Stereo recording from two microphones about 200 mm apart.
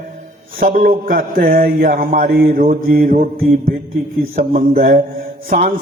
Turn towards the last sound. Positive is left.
turn(degrees=-45)  # may be behind; listen again after turning